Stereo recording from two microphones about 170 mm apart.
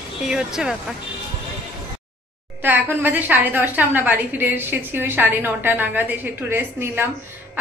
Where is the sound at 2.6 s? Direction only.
10° right (ahead or behind).